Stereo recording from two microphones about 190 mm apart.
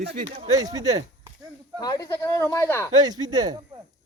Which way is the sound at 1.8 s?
20° left (ahead or behind).